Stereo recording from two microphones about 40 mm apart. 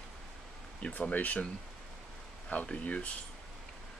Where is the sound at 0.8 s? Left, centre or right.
Left.